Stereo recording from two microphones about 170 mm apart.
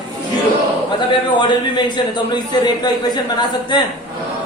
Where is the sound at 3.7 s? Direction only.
25° left (ahead or behind).